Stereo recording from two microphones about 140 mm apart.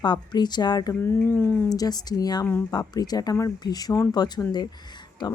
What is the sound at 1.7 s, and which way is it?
A woman's voice, 30° left (ahead or behind).